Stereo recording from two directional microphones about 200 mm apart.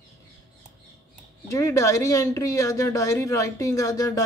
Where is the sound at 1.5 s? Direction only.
15° left (ahead or behind).